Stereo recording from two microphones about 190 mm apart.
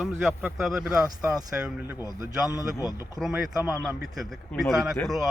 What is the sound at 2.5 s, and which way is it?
Speech, 20° left (ahead or behind).